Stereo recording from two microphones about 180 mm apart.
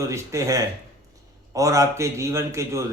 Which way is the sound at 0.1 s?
15° right (ahead or behind).